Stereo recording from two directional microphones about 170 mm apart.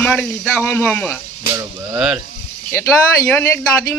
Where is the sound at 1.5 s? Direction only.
10° right (ahead or behind).